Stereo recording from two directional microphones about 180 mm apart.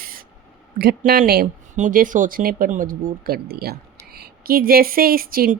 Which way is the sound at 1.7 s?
45° right (ahead or behind).